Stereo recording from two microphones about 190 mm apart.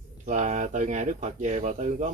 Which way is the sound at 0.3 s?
40° right (ahead or behind).